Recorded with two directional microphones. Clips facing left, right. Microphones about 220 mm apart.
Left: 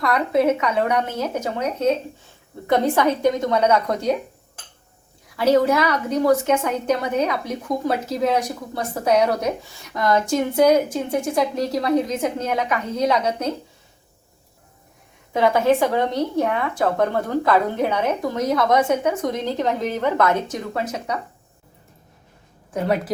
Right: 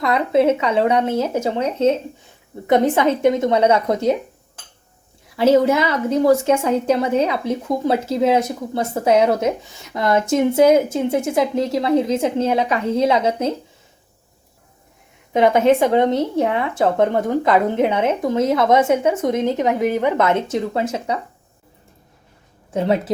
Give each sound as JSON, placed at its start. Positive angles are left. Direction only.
{"t": 0.0, "sound": "speech", "side_deg": -25}
{"t": 5.4, "sound": "speech", "side_deg": -25}
{"t": 15.3, "sound": "speech", "side_deg": -20}
{"t": 22.7, "sound": "speech", "side_deg": -25}